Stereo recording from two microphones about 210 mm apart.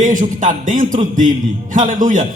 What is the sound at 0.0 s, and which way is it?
A man's voice, 35° right (ahead or behind).